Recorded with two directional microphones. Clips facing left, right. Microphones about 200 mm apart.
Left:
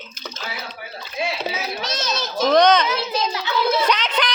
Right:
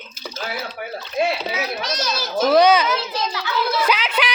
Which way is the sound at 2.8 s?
20° left (ahead or behind).